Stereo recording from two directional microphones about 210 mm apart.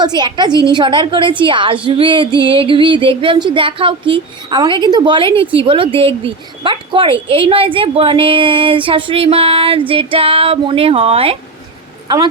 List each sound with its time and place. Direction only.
0.2 s a woman's voice: 20° right (ahead or behind)